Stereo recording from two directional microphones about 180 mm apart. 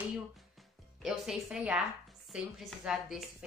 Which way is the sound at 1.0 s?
5° right (ahead or behind).